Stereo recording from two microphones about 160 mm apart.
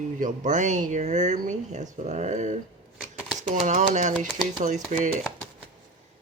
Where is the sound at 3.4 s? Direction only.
50° right (ahead or behind).